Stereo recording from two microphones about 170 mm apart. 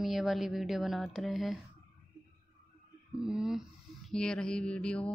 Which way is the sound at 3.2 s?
5° right (ahead or behind).